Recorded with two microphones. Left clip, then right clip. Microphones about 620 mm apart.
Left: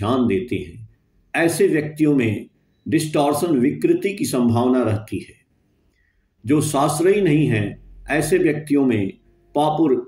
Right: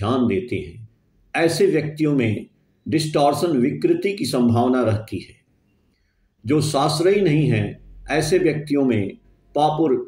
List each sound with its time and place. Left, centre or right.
0.0 s speech: left
6.4 s speech: left